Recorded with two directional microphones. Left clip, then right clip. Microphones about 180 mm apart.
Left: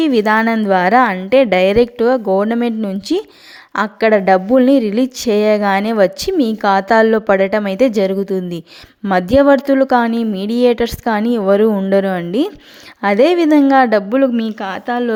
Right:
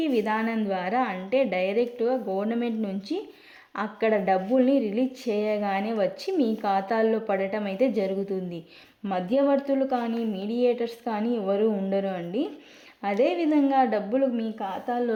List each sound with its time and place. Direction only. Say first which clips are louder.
0.0 s a woman's voice: left 13 dB; 40° left (ahead or behind)